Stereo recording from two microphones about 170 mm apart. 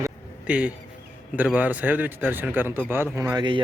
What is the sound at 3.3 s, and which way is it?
Speech, 30° right (ahead or behind).